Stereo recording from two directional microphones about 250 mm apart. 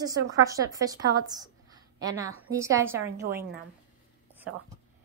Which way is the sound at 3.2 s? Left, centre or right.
Right.